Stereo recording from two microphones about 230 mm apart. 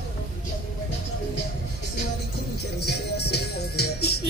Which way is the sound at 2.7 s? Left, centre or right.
Left.